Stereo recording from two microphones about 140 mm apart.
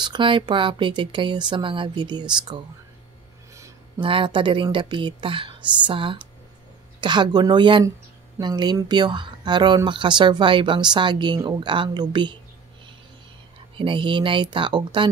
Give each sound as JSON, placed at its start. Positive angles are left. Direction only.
{"t": 0.0, "sound": "speech", "side_deg": -35}
{"t": 4.0, "sound": "speech", "side_deg": -35}
{"t": 13.7, "sound": "speech", "side_deg": -35}